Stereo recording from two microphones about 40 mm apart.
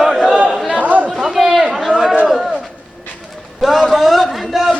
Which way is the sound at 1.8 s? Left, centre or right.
Centre.